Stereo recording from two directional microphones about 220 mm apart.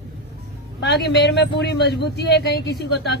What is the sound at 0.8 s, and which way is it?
A man's voice, 50° left (ahead or behind).